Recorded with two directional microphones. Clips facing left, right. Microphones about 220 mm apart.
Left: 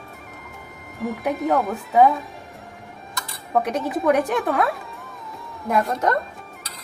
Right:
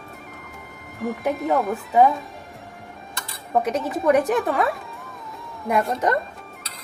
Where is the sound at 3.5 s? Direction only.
Centre (ahead or behind).